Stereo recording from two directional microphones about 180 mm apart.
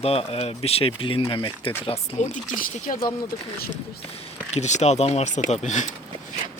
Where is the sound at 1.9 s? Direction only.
45° left (ahead or behind).